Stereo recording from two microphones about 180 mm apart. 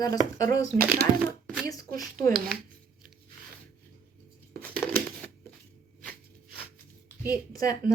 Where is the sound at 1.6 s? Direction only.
20° left (ahead or behind).